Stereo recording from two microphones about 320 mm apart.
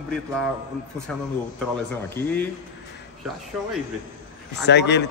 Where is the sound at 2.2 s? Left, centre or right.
Centre.